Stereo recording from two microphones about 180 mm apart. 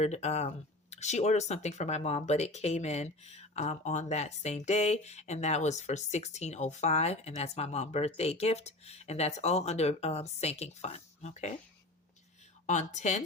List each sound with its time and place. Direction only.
0.0 s speech: 40° left (ahead or behind)
12.6 s speech: 40° left (ahead or behind)